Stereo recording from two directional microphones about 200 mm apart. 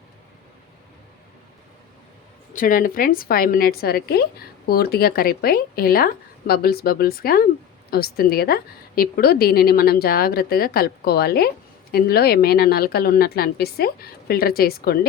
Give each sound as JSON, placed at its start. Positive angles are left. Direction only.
{"t": 2.5, "sound": "a woman's voice", "side_deg": 40}